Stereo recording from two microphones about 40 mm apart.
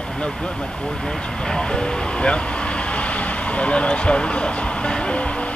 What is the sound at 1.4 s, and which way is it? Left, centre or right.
Vehicle, centre.